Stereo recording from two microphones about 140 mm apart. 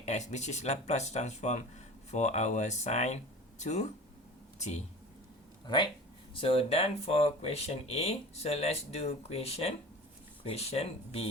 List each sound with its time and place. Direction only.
0.0 s speech: 55° left (ahead or behind)
5.6 s speech: 30° left (ahead or behind)